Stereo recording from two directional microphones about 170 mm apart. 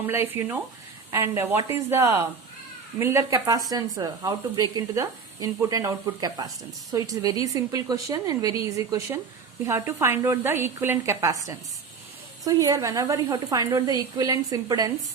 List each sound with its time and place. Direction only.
0.0 s speech: 15° right (ahead or behind)